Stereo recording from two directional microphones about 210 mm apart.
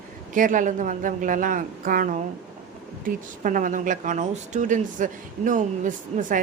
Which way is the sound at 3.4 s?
40° right (ahead or behind).